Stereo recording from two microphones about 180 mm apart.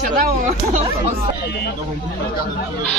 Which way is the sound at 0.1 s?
45° right (ahead or behind).